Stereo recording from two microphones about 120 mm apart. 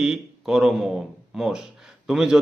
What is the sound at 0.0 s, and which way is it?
A man's voice, 5° right (ahead or behind).